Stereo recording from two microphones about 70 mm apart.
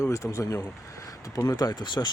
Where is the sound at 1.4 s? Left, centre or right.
Left.